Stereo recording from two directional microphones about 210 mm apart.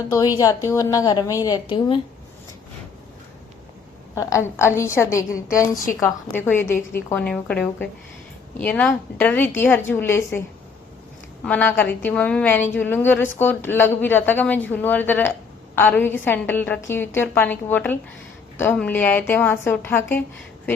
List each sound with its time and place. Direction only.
0.3 s speech: 15° left (ahead or behind)
4.1 s speech: 15° left (ahead or behind)
11.4 s speech: 10° left (ahead or behind)